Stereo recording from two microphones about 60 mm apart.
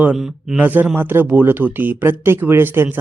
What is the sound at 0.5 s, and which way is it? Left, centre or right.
Speech, right.